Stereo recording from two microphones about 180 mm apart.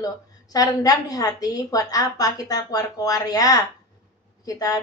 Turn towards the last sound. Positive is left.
turn(degrees=20)  # may be behind; listen again after turning